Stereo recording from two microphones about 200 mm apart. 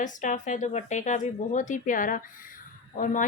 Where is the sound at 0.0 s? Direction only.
40° left (ahead or behind).